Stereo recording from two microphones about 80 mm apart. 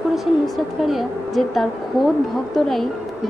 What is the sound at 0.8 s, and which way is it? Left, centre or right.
A woman's voice, centre.